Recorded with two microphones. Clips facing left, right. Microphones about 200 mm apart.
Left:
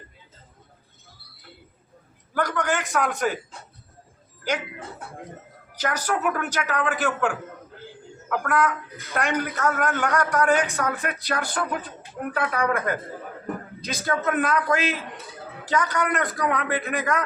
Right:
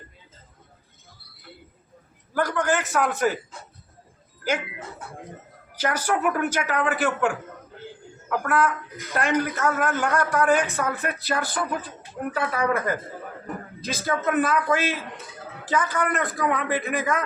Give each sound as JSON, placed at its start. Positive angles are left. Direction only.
{"t": 2.3, "sound": "a man's voice", "side_deg": -5}
{"t": 5.7, "sound": "a man's voice", "side_deg": -10}